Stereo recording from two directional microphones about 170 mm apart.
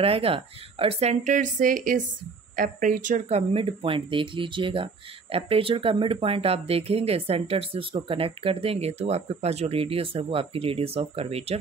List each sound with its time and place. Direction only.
0.0 s speech: 35° right (ahead or behind)